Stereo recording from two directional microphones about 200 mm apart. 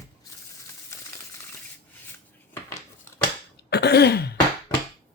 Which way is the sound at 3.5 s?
55° left (ahead or behind).